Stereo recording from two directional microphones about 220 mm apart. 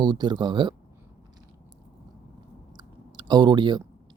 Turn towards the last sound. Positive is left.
turn(degrees=-20)  # may be behind; listen again after turning